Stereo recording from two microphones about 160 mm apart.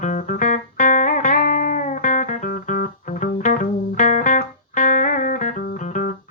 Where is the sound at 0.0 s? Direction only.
55° left (ahead or behind).